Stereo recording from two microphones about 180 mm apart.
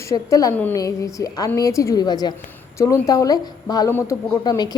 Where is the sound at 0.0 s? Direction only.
15° left (ahead or behind).